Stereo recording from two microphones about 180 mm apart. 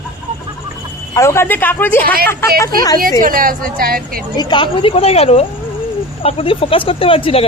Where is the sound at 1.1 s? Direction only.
15° left (ahead or behind).